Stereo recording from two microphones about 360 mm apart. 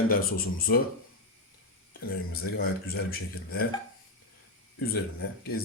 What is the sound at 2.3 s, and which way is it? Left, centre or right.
Speech, left.